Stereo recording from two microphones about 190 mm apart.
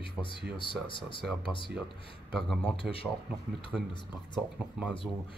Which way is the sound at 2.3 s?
Centre (ahead or behind).